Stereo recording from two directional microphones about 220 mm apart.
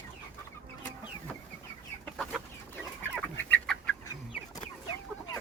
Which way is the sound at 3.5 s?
5° left (ahead or behind).